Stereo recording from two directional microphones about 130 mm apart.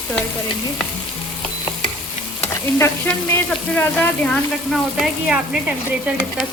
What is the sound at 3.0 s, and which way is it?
Speech, 10° left (ahead or behind).